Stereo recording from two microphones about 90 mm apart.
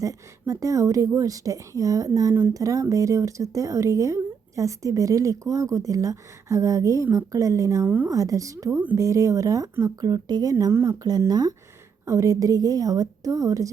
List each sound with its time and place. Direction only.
0.0 s a woman's voice: 40° right (ahead or behind)
7.9 s speech: 20° right (ahead or behind)
8.1 s a woman's voice: 40° right (ahead or behind)
10.7 s speech: 30° right (ahead or behind)
11.3 s a woman's voice: 45° right (ahead or behind)